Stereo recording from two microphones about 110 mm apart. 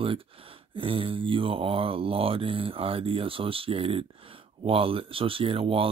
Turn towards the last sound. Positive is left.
turn(degrees=-60)  # may be behind; listen again after turning